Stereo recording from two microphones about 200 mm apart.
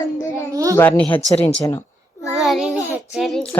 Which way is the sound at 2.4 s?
Centre (ahead or behind).